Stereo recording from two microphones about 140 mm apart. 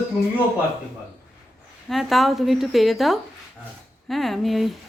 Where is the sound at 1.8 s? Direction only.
Centre (ahead or behind).